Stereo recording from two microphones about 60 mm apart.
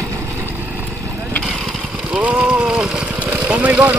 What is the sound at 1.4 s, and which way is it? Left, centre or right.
Vehicle, centre.